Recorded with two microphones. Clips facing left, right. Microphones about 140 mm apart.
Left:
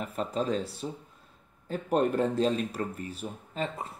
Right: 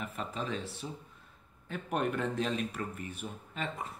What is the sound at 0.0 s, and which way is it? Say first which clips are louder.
Speech: left 7 dB; 35° left (ahead or behind).